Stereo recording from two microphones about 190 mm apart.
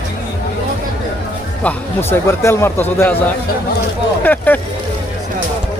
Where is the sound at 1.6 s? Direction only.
10° left (ahead or behind).